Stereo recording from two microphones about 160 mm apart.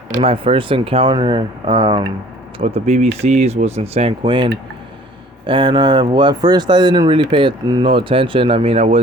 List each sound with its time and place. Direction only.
0.2 s speech: 35° right (ahead or behind)
2.6 s speech: 40° right (ahead or behind)